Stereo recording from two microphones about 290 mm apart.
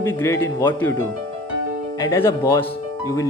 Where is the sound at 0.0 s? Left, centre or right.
Centre.